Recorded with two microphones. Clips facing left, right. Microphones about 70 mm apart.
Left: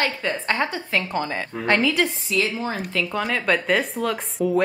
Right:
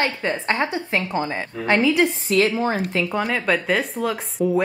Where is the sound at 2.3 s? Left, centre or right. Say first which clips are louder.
Right 5 dB; right.